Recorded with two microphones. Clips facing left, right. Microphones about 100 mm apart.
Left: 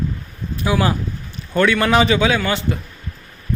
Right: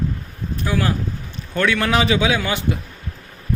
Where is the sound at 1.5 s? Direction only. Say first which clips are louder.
Left 4 dB; centre (ahead or behind).